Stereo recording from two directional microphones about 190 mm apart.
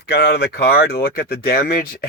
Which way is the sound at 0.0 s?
60° left (ahead or behind).